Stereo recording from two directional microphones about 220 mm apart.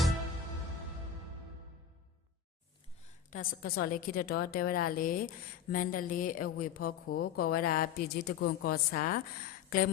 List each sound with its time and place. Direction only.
3.2 s a woman's voice: 40° left (ahead or behind)